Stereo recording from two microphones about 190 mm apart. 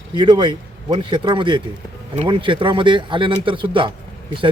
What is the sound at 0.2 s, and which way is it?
A man's voice, 25° right (ahead or behind).